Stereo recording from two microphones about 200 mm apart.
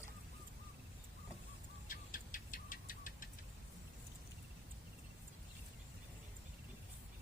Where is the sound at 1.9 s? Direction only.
40° left (ahead or behind).